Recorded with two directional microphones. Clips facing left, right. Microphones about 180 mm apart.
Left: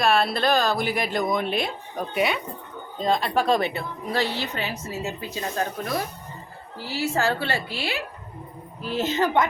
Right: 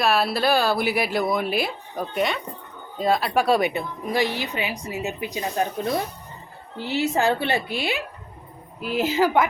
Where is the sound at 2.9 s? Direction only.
5° right (ahead or behind).